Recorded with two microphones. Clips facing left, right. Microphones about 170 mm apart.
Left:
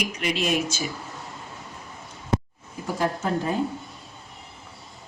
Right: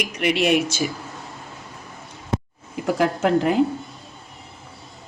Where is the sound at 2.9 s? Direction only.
90° right.